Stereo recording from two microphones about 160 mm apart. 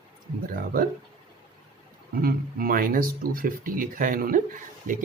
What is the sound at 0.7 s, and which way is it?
Speech, 65° right (ahead or behind).